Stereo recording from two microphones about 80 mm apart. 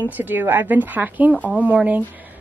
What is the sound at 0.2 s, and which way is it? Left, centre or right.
A woman's voice, right.